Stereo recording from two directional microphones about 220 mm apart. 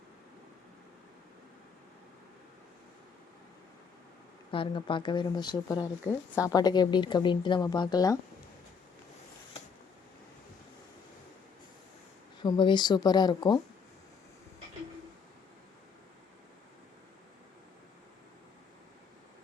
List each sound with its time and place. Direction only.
4.5 s a woman's voice: 25° left (ahead or behind)
12.4 s speech: 20° left (ahead or behind)